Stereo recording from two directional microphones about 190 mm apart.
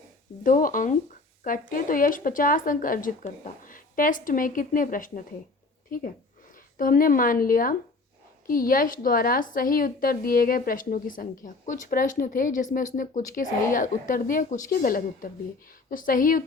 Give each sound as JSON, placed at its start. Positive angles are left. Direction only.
{"t": 0.4, "sound": "speech", "side_deg": 45}